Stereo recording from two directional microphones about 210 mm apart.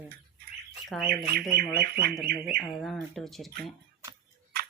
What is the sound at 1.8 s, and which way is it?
Speech, 50° right (ahead or behind).